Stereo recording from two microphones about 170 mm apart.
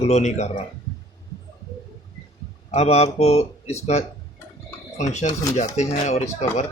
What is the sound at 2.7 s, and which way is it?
A man's voice, 40° left (ahead or behind).